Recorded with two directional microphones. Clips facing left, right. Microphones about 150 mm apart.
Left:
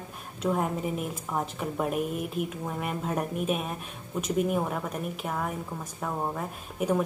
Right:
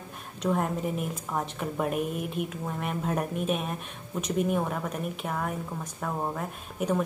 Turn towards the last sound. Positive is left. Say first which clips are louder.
# left 1 dB
turn(degrees=0)  # may be behind; listen again after turning